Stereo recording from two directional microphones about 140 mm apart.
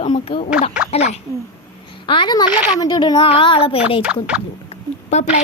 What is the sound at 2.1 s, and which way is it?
Speech, 35° left (ahead or behind).